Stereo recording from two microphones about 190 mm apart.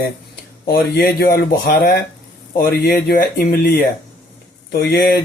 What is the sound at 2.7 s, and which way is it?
Speech, 55° left (ahead or behind).